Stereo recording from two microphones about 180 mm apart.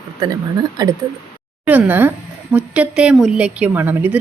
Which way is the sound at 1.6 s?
10° right (ahead or behind).